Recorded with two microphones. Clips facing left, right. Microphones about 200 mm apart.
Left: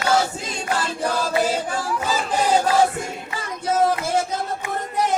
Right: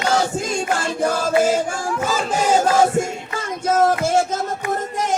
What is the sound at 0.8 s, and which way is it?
Music, 45° right (ahead or behind).